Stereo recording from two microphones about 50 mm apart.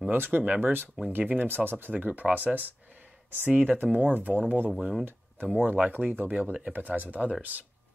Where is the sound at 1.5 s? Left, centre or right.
Right.